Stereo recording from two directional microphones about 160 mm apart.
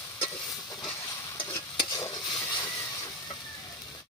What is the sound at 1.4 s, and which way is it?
Stir, 25° left (ahead or behind).